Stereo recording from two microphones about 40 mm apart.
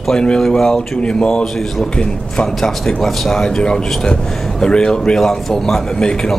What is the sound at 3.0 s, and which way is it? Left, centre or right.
Speech, centre.